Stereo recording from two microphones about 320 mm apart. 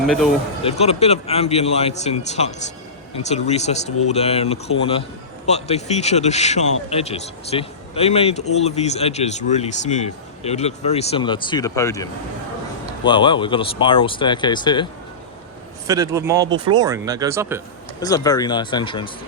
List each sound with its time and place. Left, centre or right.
0.6 s a man's voice: centre
13.1 s speech: centre
15.9 s speech: centre
18.0 s speech: centre